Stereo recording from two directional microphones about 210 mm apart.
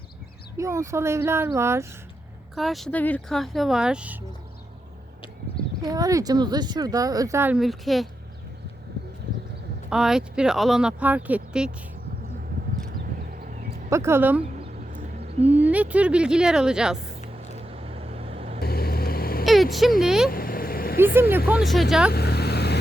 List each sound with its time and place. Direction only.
0.5 s speech: 15° right (ahead or behind)
2.6 s speech: centre (ahead or behind)
5.8 s speech: 15° right (ahead or behind); by 8.0 s centre (ahead or behind)
9.9 s speech: 5° right (ahead or behind)
13.3 s a sound: 40° right (ahead or behind)
13.9 s speech: 10° right (ahead or behind)
14.5 s a sound: 35° right (ahead or behind)
15.4 s speech: 10° right (ahead or behind)
17.5 s vehicle: 30° right (ahead or behind)
18.6 s vehicle: 45° left (ahead or behind)
20.0 s speech: centre (ahead or behind)
20.3 s vehicle: 45° left (ahead or behind)
21.0 s speech: 10° right (ahead or behind)
22.1 s vehicle: 50° left (ahead or behind)